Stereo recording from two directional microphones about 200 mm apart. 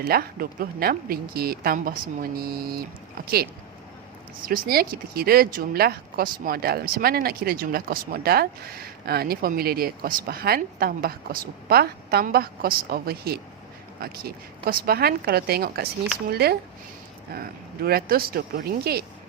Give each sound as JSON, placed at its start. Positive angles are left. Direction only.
{"t": 0.0, "sound": "speech", "side_deg": -45}